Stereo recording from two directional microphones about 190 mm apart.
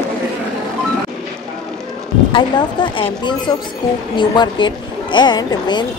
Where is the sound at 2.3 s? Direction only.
25° left (ahead or behind).